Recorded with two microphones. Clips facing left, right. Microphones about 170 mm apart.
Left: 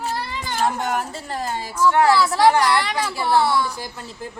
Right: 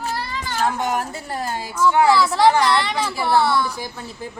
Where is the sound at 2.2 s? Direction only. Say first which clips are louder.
Even; 10° left (ahead or behind).